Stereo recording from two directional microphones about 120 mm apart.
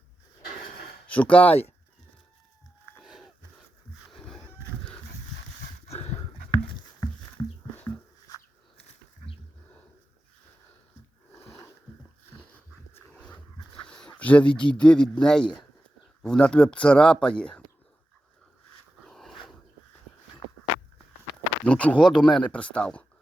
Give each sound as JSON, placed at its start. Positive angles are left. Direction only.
{"t": 1.1, "sound": "speech", "side_deg": 10}
{"t": 3.0, "sound": "a sound", "side_deg": -5}
{"t": 5.9, "sound": "a sound", "side_deg": 60}
{"t": 7.4, "sound": "dog", "side_deg": 30}
{"t": 8.8, "sound": "a sound", "side_deg": 55}
{"t": 13.1, "sound": "dog", "side_deg": 10}
{"t": 13.9, "sound": "speech", "side_deg": 10}
{"t": 19.0, "sound": "dog", "side_deg": 0}
{"t": 21.6, "sound": "speech", "side_deg": 10}